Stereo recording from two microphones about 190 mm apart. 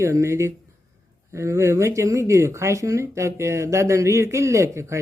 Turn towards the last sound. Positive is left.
turn(degrees=-15)  # may be behind; listen again after turning